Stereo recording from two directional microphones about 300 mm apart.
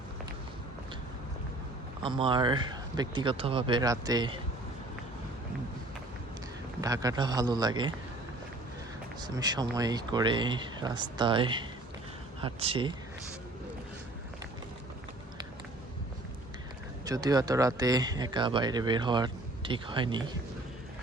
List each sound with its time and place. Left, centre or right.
2.0 s speech: centre
6.8 s speech: centre
9.2 s speech: centre
17.1 s speech: centre